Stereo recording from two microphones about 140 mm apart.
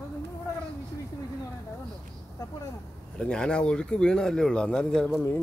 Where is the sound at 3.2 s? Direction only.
5° left (ahead or behind).